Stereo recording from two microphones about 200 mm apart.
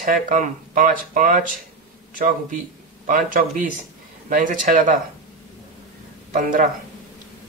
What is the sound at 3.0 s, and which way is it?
Speech, 45° right (ahead or behind).